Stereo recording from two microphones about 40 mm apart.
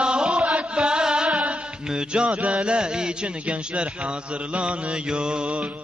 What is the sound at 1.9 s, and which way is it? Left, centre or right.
Speech, right.